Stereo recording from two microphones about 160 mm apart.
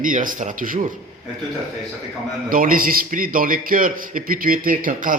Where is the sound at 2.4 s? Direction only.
60° right (ahead or behind).